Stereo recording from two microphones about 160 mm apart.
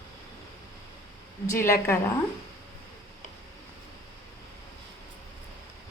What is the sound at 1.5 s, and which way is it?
Speech, 15° left (ahead or behind).